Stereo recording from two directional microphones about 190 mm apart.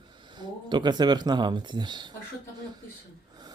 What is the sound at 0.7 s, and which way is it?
Speech, 25° right (ahead or behind).